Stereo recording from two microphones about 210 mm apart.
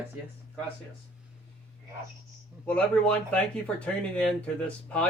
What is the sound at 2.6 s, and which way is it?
A man's voice, 5° left (ahead or behind).